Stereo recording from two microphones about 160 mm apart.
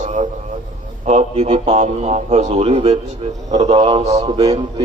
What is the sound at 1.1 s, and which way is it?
A man's voice, 45° right (ahead or behind).